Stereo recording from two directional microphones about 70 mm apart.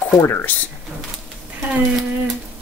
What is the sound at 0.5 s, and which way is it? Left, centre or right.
Speech, left.